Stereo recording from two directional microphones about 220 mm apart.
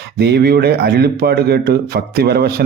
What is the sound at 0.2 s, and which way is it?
Speech, 45° right (ahead or behind).